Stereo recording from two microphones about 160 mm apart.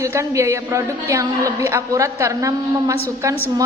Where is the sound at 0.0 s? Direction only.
15° right (ahead or behind).